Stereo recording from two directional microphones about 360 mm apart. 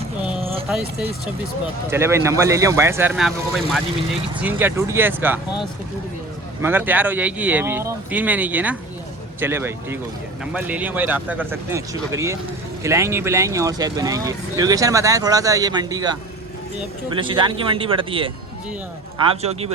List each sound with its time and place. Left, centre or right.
1.9 s speech: centre
6.6 s speech: centre
17.2 s speech: centre